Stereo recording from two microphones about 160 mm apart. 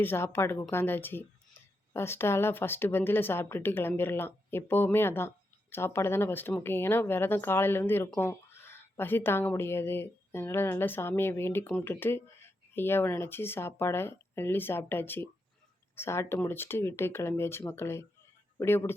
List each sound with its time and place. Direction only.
0.0 s speech: 15° left (ahead or behind)